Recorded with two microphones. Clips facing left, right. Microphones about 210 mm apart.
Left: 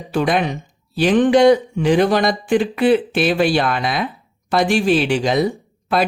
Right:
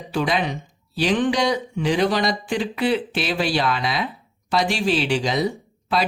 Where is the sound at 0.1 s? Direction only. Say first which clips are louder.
Left 4 dB; 50° left (ahead or behind).